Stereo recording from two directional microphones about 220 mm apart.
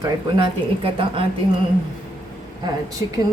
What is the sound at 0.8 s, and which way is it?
Speech, 25° right (ahead or behind).